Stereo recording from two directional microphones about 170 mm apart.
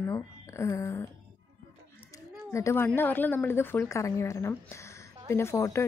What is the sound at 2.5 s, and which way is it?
A woman's voice, 15° left (ahead or behind).